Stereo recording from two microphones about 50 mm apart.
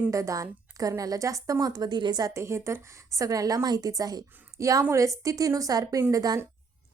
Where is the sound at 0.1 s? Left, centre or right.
Right.